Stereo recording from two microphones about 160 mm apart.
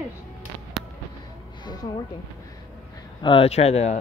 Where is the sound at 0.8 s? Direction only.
5° right (ahead or behind).